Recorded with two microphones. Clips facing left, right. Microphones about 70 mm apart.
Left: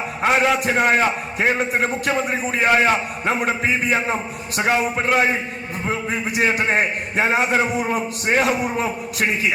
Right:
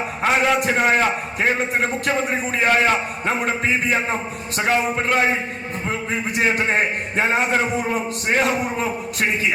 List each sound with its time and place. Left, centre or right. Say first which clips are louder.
0.2 s a man's voice: left 1 dB; centre